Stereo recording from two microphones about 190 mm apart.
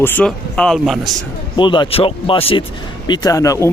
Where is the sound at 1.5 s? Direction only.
25° left (ahead or behind).